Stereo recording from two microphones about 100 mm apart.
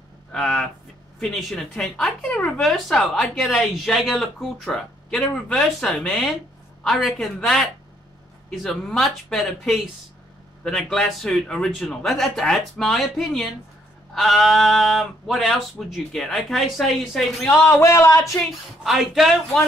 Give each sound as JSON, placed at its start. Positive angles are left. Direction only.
{"t": 0.3, "sound": "speech", "side_deg": 10}
{"t": 17.6, "sound": "speech", "side_deg": 30}
{"t": 18.9, "sound": "speech", "side_deg": 0}